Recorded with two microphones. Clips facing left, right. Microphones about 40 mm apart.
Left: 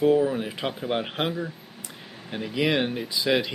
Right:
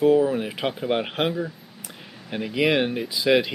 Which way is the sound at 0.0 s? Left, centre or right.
Centre.